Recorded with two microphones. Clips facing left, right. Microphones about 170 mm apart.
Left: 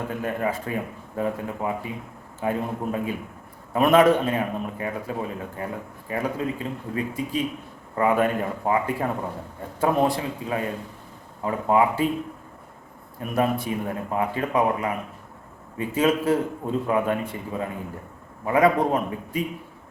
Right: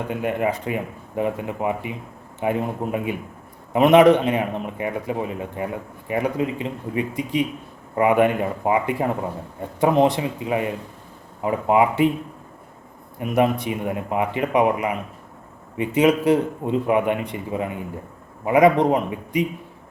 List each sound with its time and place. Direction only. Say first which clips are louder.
0.2 s a man's voice: right 4 dB; 15° right (ahead or behind)
13.1 s a man's voice: right 4 dB; 20° right (ahead or behind)